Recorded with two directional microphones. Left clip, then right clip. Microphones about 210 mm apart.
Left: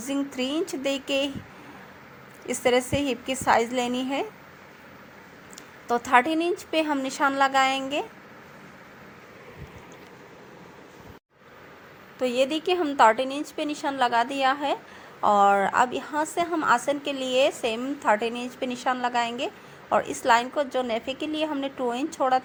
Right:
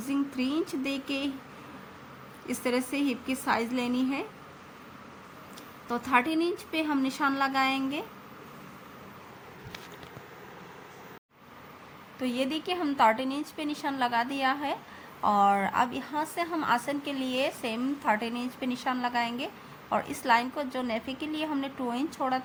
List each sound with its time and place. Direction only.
0.1 s a woman's voice: 25° left (ahead or behind)
2.5 s a woman's voice: 25° left (ahead or behind)
5.9 s a woman's voice: 25° left (ahead or behind)
12.2 s a woman's voice: 20° left (ahead or behind)